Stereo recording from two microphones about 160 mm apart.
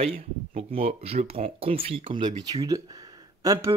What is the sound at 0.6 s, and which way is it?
Speech, 40° right (ahead or behind).